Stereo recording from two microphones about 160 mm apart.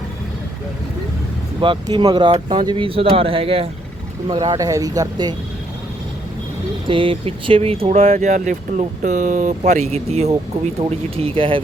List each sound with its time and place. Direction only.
1.6 s speech: 30° right (ahead or behind)
6.8 s speech: 35° right (ahead or behind)